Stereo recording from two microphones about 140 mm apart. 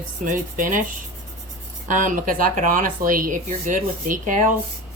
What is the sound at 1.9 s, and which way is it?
Speech, 70° right (ahead or behind).